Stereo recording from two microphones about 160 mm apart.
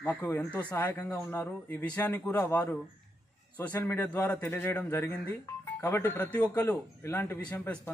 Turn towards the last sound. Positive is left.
turn(degrees=10)  # may be behind; listen again after turning